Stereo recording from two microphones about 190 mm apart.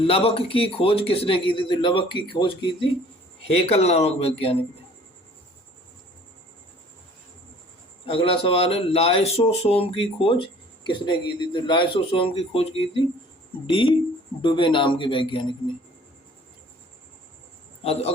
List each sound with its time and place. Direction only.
0.0 s speech: 30° left (ahead or behind)
8.0 s speech: 30° left (ahead or behind)
13.7 s speech: 25° left (ahead or behind)